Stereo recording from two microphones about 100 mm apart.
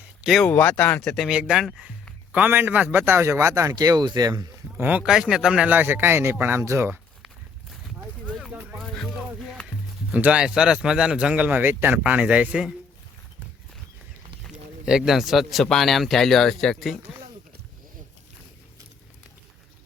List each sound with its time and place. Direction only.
0.2 s speech: 5° right (ahead or behind)
0.4 s speech: 10° left (ahead or behind)
1.0 s speech: centre (ahead or behind)
2.3 s speech: 15° right (ahead or behind)
3.8 s speech: 45° right (ahead or behind)
4.8 s speech: 15° right (ahead or behind)
5.0 s speech: 5° right (ahead or behind)
5.7 s speech: 20° right (ahead or behind)
9.6 s speech: 15° right (ahead or behind)
14.4 s speech: 5° right (ahead or behind)